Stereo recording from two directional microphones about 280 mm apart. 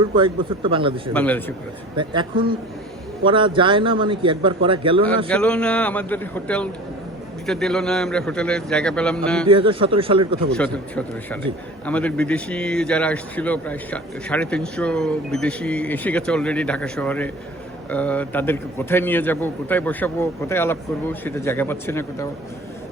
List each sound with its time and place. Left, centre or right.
0.2 s a man's voice: centre
1.1 s a man's voice: centre
2.0 s a man's voice: centre
5.3 s a man's voice: centre
9.5 s speech: centre
10.5 s a man's voice: centre